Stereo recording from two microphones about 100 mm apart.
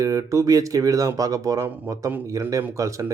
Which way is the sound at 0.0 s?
35° right (ahead or behind).